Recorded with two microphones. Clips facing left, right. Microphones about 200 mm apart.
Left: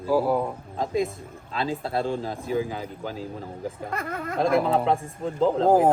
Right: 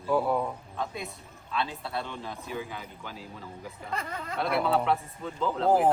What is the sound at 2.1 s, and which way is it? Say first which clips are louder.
Speech: left 10 dB; 40° left (ahead or behind).